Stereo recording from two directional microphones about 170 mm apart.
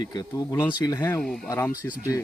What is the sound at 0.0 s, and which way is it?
Speech, 25° left (ahead or behind).